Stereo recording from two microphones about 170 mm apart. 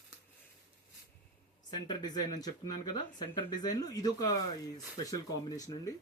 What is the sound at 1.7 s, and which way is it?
Speech, 25° left (ahead or behind).